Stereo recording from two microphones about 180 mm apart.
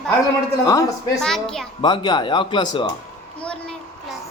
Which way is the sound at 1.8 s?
25° left (ahead or behind).